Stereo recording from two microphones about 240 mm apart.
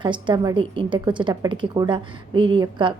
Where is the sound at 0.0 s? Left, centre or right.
Centre.